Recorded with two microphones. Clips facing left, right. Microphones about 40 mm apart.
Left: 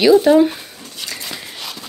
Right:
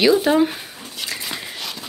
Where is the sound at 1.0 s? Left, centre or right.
Centre.